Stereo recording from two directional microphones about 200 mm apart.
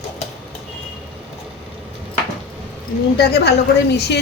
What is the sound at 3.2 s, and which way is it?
A woman's voice, 55° left (ahead or behind).